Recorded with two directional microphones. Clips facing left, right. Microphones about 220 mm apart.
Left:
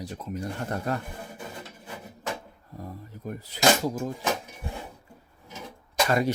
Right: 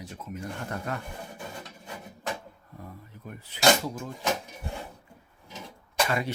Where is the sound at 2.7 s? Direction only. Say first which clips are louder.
Left 6 dB; 40° left (ahead or behind).